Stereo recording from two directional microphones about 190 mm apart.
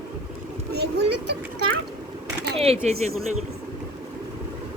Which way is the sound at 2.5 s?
30° right (ahead or behind).